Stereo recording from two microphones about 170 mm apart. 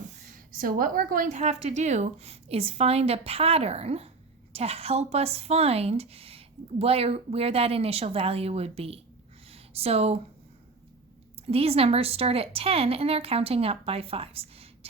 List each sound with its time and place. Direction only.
0.5 s speech: 55° right (ahead or behind); by 9.0 s 35° right (ahead or behind)
9.5 s a sound: 35° right (ahead or behind)
11.4 s speech: 35° right (ahead or behind)